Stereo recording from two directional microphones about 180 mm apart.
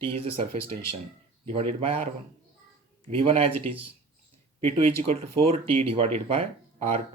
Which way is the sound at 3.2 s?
30° right (ahead or behind).